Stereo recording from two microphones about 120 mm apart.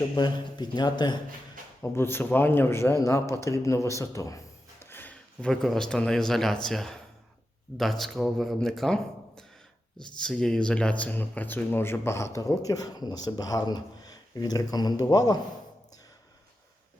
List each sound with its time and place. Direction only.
0.2 s a man's voice: 40° left (ahead or behind)
1.8 s speech: 20° left (ahead or behind)
4.8 s a sound: 15° left (ahead or behind)
5.5 s speech: 5° left (ahead or behind); by 15.4 s 30° left (ahead or behind)